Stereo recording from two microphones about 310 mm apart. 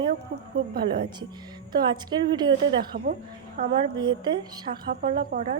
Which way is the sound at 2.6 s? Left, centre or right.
Right.